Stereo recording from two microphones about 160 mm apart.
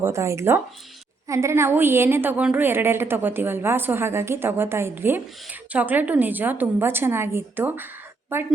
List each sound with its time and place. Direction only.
0.0 s a woman's voice: 20° right (ahead or behind)